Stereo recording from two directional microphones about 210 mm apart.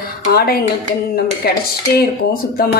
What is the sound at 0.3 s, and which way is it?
A woman's voice, 50° left (ahead or behind).